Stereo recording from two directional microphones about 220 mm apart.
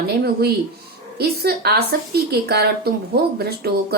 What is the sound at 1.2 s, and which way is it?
A woman's voice, 45° right (ahead or behind).